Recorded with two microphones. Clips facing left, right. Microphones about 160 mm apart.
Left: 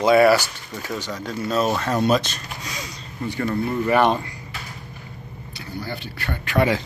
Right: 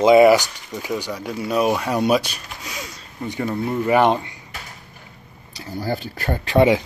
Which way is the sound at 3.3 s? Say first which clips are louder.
Even; 15° right (ahead or behind).